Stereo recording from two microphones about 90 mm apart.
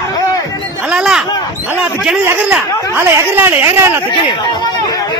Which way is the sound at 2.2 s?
20° right (ahead or behind).